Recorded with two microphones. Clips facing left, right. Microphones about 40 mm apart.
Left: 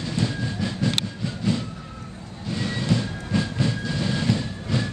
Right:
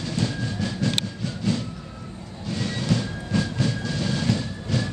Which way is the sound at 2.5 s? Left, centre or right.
Centre.